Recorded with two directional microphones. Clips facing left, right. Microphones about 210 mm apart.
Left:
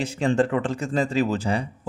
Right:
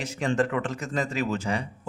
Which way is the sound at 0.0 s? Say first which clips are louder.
Left 4 dB; 30° left (ahead or behind).